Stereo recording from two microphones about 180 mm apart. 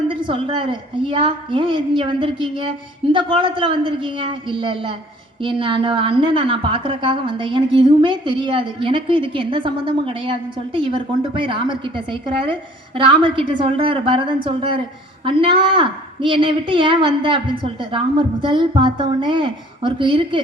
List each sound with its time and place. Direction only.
0.1 s a woman's voice: 30° right (ahead or behind)